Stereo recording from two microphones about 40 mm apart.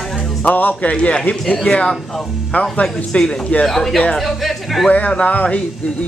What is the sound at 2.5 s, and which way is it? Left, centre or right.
Speech, left.